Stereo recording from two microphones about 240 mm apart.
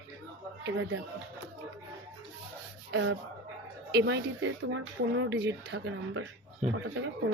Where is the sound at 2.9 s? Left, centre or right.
Right.